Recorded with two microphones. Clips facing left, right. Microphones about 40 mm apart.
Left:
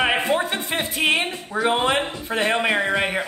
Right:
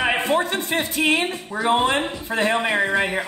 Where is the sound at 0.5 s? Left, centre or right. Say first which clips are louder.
Right 2 dB; centre.